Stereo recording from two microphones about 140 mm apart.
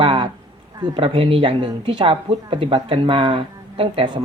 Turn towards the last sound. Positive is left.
turn(degrees=-40)  # may be behind; listen again after turning